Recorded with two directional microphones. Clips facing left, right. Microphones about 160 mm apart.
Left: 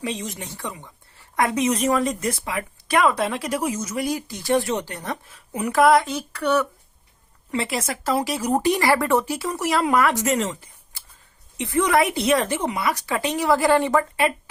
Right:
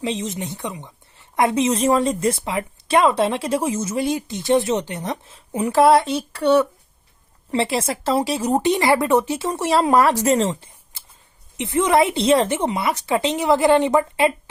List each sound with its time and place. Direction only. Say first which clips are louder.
0.0 s a woman's voice: right 4 dB; 20° right (ahead or behind)